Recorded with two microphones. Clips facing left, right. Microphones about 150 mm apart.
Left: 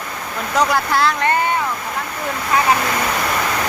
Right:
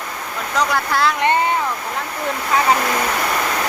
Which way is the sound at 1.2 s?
20° right (ahead or behind).